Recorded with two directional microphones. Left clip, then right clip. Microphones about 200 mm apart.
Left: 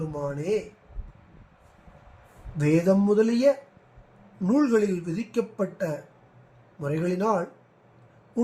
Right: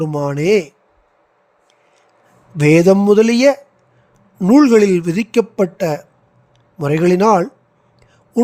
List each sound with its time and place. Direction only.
0.1 s a man's voice: 50° right (ahead or behind)
2.6 s a man's voice: 50° right (ahead or behind)